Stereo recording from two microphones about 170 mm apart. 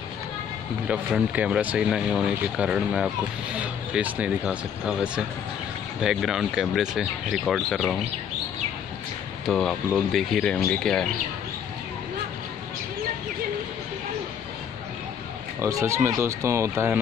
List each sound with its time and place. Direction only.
0.8 s speech: 5° right (ahead or behind)
9.5 s speech: centre (ahead or behind)
15.6 s speech: 15° right (ahead or behind)